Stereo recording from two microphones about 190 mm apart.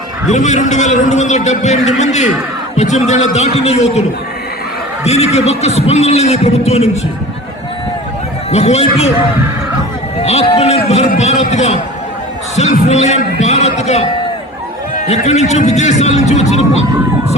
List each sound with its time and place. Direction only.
0.3 s a man's voice: 40° left (ahead or behind)
5.0 s a man's voice: 35° left (ahead or behind)
8.4 s a man's voice: 35° left (ahead or behind)
10.2 s a man's voice: 35° left (ahead or behind)